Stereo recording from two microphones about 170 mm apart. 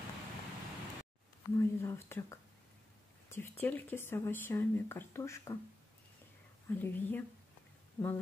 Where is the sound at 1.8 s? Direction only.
15° left (ahead or behind).